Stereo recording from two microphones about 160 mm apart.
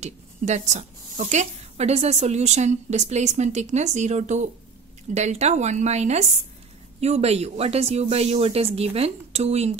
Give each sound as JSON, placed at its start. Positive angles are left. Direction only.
{"t": 0.0, "sound": "a woman's voice", "side_deg": -45}